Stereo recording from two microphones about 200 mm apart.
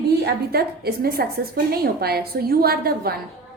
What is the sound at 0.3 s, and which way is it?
A woman's voice, 50° right (ahead or behind).